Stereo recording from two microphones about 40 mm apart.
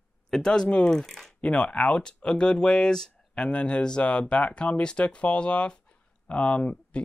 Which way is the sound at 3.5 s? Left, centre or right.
Left.